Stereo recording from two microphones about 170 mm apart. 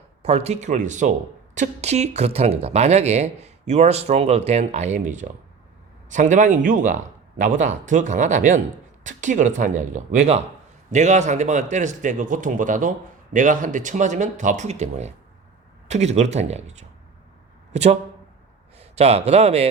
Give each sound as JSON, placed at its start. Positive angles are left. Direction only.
{"t": 0.2, "sound": "speech", "side_deg": -40}
{"t": 17.7, "sound": "a sound", "side_deg": -40}
{"t": 18.8, "sound": "speech", "side_deg": -40}